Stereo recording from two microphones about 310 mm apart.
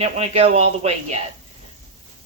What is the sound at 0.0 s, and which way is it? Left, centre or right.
Speech, centre.